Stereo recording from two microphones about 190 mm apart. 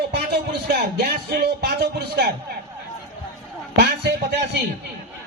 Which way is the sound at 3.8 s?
60° right (ahead or behind).